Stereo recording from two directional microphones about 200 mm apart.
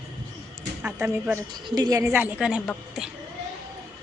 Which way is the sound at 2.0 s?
10° right (ahead or behind).